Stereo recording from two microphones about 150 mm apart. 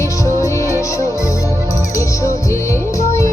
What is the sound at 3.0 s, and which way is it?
Music, 20° left (ahead or behind).